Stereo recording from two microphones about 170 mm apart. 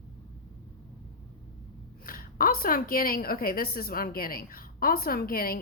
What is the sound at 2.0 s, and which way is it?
A woman's voice, 60° left (ahead or behind).